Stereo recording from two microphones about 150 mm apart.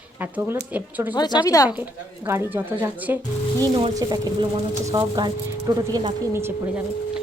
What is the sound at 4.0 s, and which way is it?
Speech, 25° right (ahead or behind).